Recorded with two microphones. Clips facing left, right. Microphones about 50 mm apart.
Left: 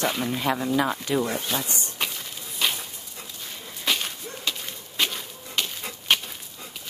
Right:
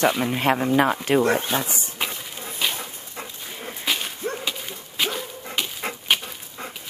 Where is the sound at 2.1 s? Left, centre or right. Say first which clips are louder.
Right 3 dB; right.